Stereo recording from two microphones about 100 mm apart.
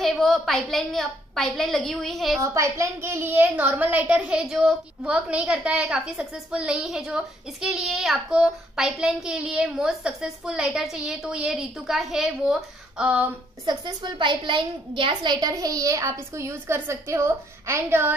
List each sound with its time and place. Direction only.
0.0 s a woman's voice: centre (ahead or behind)
2.4 s a woman's voice: 30° right (ahead or behind); by 13.3 s 15° right (ahead or behind)
13.7 s a woman's voice: 45° right (ahead or behind)
15.4 s a child's voice: 40° right (ahead or behind); by 18.1 s 20° right (ahead or behind)